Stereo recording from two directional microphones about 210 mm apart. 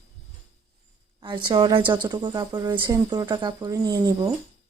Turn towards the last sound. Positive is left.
turn(degrees=-20)  # may be behind; listen again after turning